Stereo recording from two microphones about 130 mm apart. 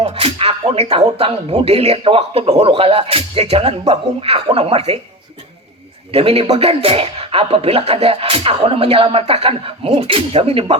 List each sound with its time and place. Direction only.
0.0 s a man's voice: 45° right (ahead or behind)
6.1 s a man's voice: 50° right (ahead or behind)